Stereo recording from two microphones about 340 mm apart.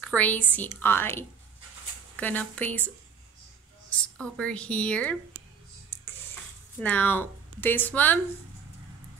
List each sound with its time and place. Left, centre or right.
0.0 s speech: centre
4.0 s speech: centre
6.8 s speech: centre